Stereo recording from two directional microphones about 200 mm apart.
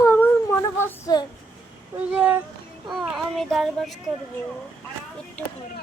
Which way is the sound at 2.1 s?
5° right (ahead or behind).